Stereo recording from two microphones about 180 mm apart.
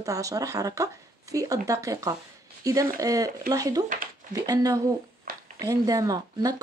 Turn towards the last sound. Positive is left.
turn(degrees=-20)  # may be behind; listen again after turning